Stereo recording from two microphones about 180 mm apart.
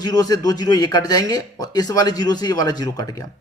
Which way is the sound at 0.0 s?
20° left (ahead or behind).